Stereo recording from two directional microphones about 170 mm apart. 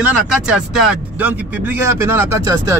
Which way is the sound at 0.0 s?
5° right (ahead or behind).